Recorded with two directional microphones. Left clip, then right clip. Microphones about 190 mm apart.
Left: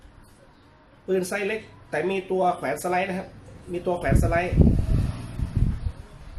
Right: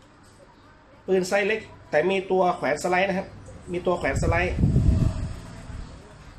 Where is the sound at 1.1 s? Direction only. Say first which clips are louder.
Right 3 dB; 15° left (ahead or behind).